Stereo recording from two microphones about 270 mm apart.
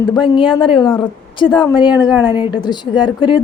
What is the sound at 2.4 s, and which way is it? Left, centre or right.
Speech, centre.